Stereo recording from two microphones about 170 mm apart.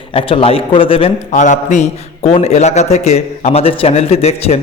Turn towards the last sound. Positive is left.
turn(degrees=35)  # may be behind; listen again after turning